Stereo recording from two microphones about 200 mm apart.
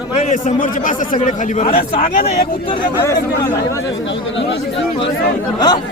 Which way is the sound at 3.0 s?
15° left (ahead or behind).